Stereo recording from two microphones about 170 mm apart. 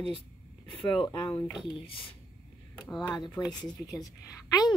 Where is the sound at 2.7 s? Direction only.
Centre (ahead or behind).